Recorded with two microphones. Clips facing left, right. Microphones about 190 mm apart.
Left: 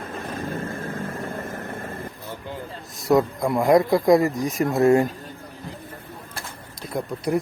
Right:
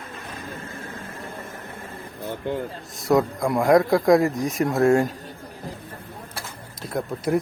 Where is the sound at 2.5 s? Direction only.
60° right (ahead or behind).